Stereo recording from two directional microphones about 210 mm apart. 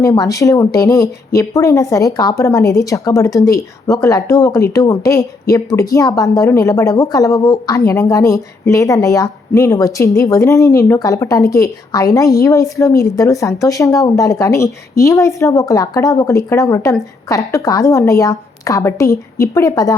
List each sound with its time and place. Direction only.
0.0 s a woman's voice: 15° left (ahead or behind)